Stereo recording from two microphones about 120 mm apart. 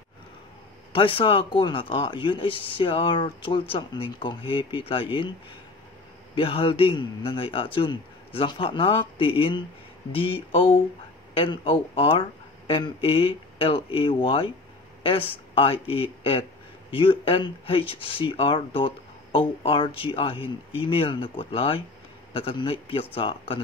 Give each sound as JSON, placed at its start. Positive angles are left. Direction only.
{"t": 0.9, "sound": "speech", "side_deg": 45}
{"t": 6.3, "sound": "speech", "side_deg": 50}